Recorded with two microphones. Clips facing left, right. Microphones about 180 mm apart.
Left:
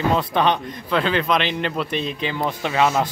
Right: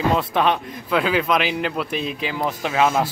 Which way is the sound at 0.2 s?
5° right (ahead or behind).